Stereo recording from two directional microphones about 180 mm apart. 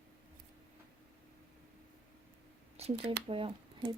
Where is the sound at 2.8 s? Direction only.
35° right (ahead or behind).